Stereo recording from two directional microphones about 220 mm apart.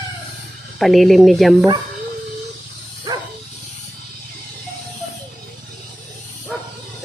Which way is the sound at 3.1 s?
15° right (ahead or behind).